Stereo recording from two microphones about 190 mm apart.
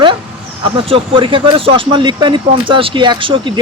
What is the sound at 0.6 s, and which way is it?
Speech, 30° right (ahead or behind).